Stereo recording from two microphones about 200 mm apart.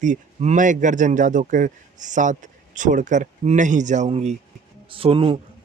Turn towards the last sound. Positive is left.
turn(degrees=-25)  # may be behind; listen again after turning